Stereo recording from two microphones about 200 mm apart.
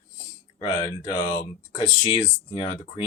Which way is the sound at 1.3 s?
35° left (ahead or behind).